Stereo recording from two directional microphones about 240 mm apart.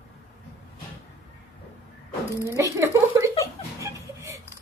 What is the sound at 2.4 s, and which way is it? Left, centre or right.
Speech, centre.